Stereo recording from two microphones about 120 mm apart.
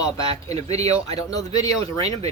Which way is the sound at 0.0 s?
30° left (ahead or behind).